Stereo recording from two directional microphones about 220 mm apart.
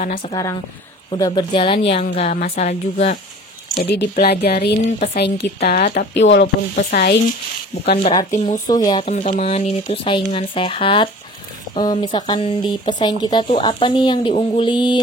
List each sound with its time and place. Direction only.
0.0 s speech: 35° left (ahead or behind)
0.3 s a woman's voice: 15° left (ahead or behind); by 3.2 s 30° left (ahead or behind)
3.7 s speech: 50° left (ahead or behind)
6.3 s speech: 50° left (ahead or behind)
8.0 s speech: 25° left (ahead or behind)
8.6 s speech: 20° left (ahead or behind)
9.1 s speech: 35° left (ahead or behind)